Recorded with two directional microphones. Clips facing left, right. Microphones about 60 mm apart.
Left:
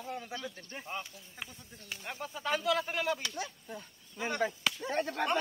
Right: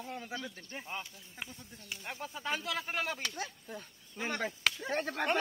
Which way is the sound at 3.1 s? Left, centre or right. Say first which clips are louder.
Left 1 dB; right.